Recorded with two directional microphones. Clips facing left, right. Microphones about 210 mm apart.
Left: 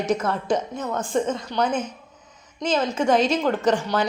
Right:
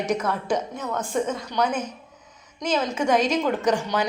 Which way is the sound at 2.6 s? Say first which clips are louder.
Left 2 dB; 10° right (ahead or behind).